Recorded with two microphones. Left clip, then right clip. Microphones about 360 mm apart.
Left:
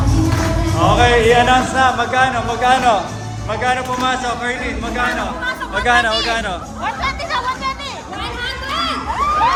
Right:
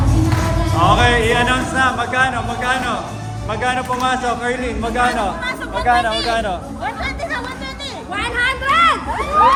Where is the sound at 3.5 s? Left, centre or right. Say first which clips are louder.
Left 1 dB; centre.